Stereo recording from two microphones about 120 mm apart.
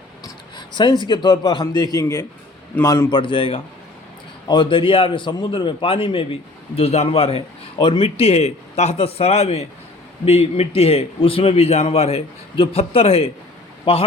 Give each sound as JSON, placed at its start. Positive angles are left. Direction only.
{"t": 0.5, "sound": "a man's voice", "side_deg": 40}
{"t": 3.2, "sound": "a man's voice", "side_deg": 45}